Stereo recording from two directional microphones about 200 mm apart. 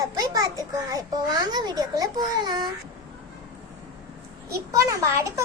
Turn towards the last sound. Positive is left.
turn(degrees=-15)  # may be behind; listen again after turning